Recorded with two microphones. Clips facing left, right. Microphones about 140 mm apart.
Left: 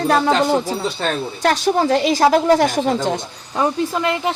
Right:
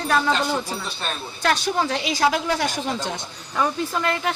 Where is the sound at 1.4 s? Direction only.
40° left (ahead or behind).